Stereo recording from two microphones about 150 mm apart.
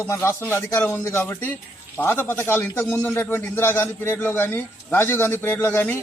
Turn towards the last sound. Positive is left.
turn(degrees=15)  # may be behind; listen again after turning